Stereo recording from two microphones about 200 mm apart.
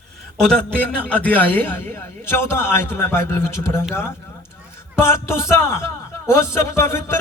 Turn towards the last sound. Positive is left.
turn(degrees=15)  # may be behind; listen again after turning